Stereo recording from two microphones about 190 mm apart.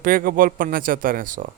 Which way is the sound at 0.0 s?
50° right (ahead or behind).